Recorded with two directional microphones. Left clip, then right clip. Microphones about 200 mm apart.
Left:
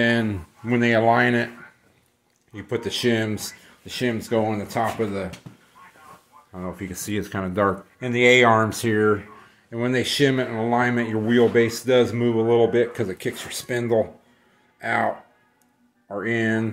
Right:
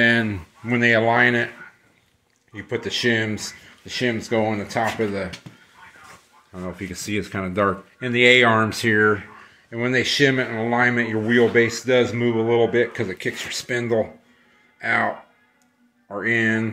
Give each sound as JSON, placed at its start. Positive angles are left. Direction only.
{"t": 0.0, "sound": "speech", "side_deg": 5}
{"t": 2.5, "sound": "speech", "side_deg": 15}
{"t": 6.5, "sound": "speech", "side_deg": -5}